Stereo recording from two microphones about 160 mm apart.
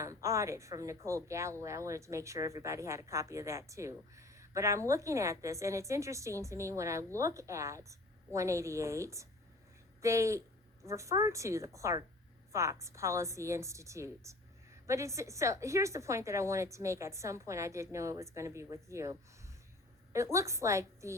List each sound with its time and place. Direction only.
0.0 s a woman's voice: 20° right (ahead or behind)
20.1 s speech: 20° right (ahead or behind)